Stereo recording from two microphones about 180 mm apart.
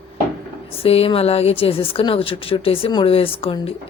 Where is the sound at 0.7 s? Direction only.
35° left (ahead or behind).